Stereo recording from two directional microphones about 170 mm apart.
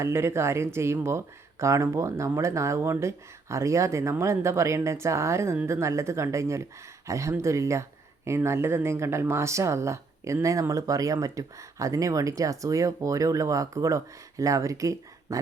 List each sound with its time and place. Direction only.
0.0 s speech: 15° right (ahead or behind)